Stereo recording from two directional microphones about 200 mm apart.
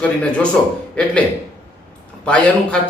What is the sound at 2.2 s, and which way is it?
Speech, 5° left (ahead or behind).